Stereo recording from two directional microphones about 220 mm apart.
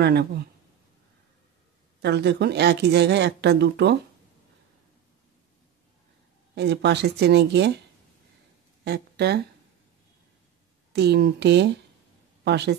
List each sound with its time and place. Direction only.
0.0 s speech: 50° right (ahead or behind)
2.0 s speech: 50° right (ahead or behind)
6.5 s speech: 50° right (ahead or behind)
8.8 s speech: 50° right (ahead or behind)
10.9 s a woman's voice: 50° right (ahead or behind)